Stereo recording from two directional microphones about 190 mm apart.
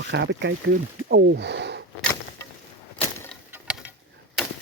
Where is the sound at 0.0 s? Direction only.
70° right (ahead or behind).